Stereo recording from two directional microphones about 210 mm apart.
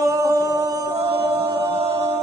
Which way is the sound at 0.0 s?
15° right (ahead or behind).